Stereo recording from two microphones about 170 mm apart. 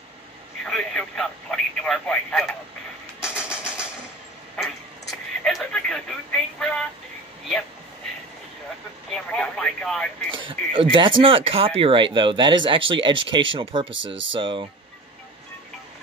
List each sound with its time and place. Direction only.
0.7 s speech: 5° left (ahead or behind)
3.2 s vehicle: 5° right (ahead or behind)
4.6 s radio: 5° left (ahead or behind)
9.1 s speech: 5° left (ahead or behind)
10.3 s speech: 30° right (ahead or behind)
13.9 s speech: 90° right
14.4 s speech: 30° right (ahead or behind)